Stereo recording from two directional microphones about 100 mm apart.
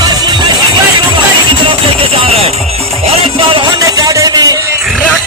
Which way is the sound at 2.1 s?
85° right.